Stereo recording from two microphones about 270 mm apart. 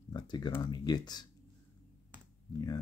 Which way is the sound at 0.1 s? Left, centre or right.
Centre.